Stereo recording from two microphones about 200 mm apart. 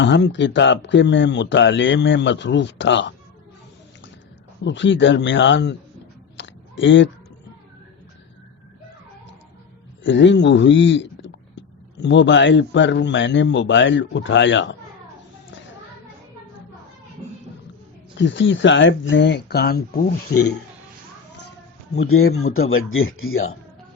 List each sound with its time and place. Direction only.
0.0 s speech: 65° left (ahead or behind)
4.6 s speech: 65° left (ahead or behind)
6.3 s chewing: 65° left (ahead or behind)
10.0 s speech: 65° left (ahead or behind)
18.2 s speech: 65° left (ahead or behind); by 20.5 s 50° left (ahead or behind)
22.5 s speech: 90° left